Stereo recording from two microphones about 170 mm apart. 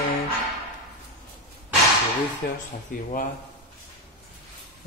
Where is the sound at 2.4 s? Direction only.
70° left (ahead or behind).